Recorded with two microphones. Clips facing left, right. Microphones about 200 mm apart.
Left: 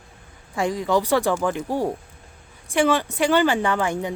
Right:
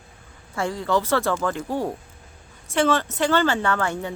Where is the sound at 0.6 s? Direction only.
15° left (ahead or behind).